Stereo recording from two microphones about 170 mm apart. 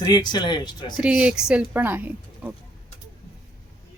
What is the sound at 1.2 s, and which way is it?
Speech, 5° right (ahead or behind).